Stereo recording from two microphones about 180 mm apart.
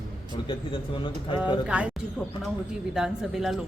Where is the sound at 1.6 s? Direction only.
5° right (ahead or behind).